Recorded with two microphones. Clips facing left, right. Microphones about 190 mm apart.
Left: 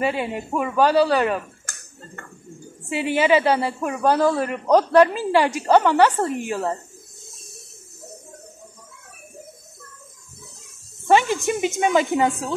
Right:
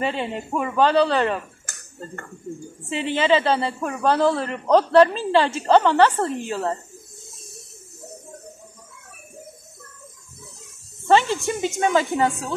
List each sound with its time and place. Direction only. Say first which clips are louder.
0.0 s a woman's voice: left 2 dB; 10° left (ahead or behind)
2.9 s a woman's voice: left 1 dB; 10° left (ahead or behind)
11.1 s a woman's voice: left 1 dB; 15° left (ahead or behind)